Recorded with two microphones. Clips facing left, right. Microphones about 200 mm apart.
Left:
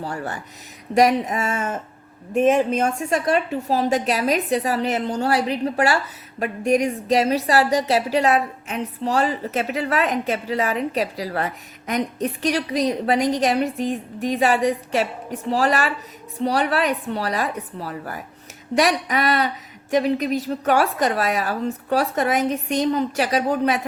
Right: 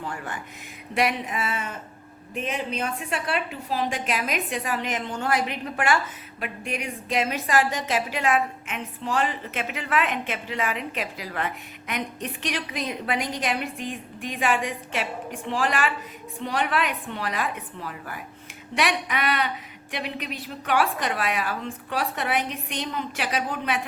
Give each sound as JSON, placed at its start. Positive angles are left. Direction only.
{"t": 0.0, "sound": "a woman's voice", "side_deg": 35}